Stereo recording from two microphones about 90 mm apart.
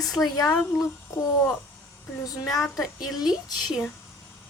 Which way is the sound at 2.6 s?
5° right (ahead or behind).